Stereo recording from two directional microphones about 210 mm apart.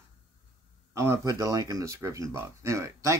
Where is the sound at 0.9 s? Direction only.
15° right (ahead or behind).